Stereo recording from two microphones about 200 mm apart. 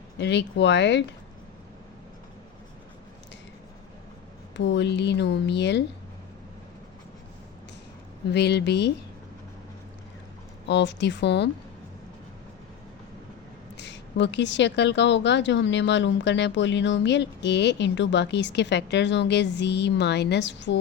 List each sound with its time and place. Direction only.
0.2 s a woman's voice: 60° left (ahead or behind)
4.5 s a woman's voice: 60° left (ahead or behind)
8.3 s a woman's voice: 55° left (ahead or behind)
10.7 s a woman's voice: 60° left (ahead or behind)
13.7 s a woman's voice: 60° left (ahead or behind)